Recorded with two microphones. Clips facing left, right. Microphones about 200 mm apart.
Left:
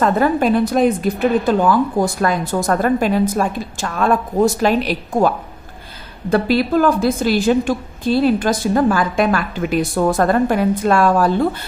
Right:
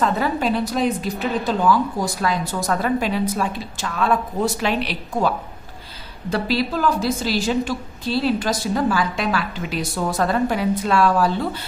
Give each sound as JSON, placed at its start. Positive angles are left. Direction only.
{"t": 0.0, "sound": "a woman's voice", "side_deg": 50}
{"t": 6.3, "sound": "a woman's voice", "side_deg": 55}